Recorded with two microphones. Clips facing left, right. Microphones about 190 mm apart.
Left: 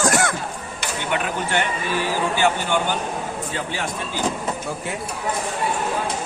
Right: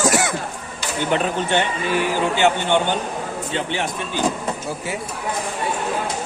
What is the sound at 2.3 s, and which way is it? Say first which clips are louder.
Speech: right 3 dB; 25° right (ahead or behind).